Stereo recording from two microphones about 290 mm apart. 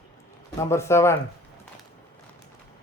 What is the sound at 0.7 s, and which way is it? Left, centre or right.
Speech, centre.